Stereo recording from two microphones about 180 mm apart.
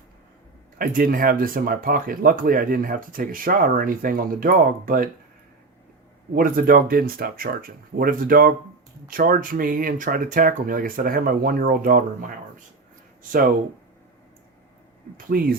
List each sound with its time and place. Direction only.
0.8 s speech: 50° right (ahead or behind)
6.3 s speech: 50° right (ahead or behind)
15.3 s speech: 55° right (ahead or behind)